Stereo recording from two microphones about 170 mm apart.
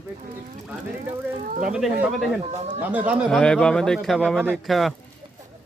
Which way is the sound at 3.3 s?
5° left (ahead or behind).